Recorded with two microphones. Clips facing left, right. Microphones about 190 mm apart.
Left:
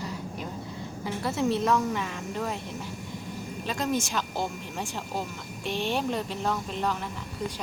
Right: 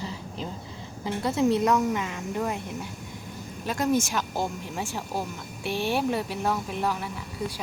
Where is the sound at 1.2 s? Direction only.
15° right (ahead or behind).